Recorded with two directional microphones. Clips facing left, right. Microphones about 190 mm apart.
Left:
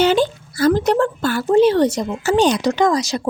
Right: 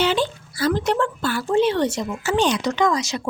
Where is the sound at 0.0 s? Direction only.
45° left (ahead or behind).